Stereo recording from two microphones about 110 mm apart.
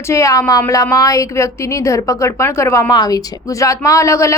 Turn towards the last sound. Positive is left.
turn(degrees=25)  # may be behind; listen again after turning